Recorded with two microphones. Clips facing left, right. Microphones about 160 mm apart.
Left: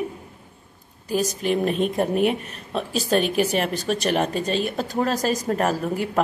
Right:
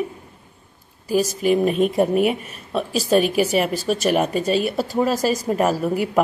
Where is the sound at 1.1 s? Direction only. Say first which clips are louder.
Right 4 dB; 5° right (ahead or behind).